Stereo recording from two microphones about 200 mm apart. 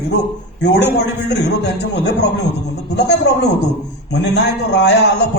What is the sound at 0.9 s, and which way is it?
Speech, 60° left (ahead or behind).